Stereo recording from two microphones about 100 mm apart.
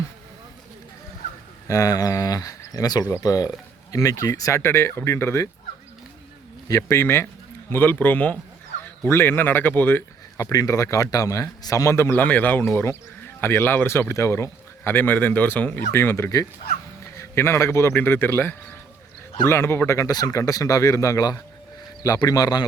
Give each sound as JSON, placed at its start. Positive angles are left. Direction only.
{"t": 1.6, "sound": "a man's voice", "side_deg": 35}
{"t": 6.7, "sound": "speech", "side_deg": 30}
{"t": 10.3, "sound": "a man's voice", "side_deg": 35}
{"t": 20.1, "sound": "a man's voice", "side_deg": 40}